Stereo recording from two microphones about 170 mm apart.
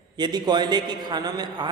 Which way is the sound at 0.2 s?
25° right (ahead or behind).